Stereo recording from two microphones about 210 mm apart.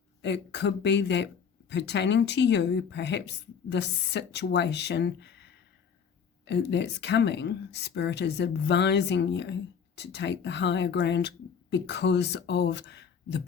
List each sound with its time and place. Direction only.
0.2 s speech: 55° left (ahead or behind)